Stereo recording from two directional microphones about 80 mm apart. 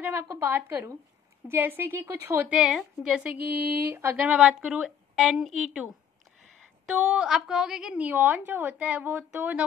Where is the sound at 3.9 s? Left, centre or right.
Right.